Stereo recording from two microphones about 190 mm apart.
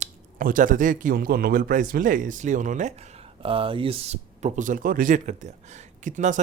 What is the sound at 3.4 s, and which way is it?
Speech, 30° right (ahead or behind).